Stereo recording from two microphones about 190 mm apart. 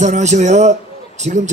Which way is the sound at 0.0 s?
40° right (ahead or behind).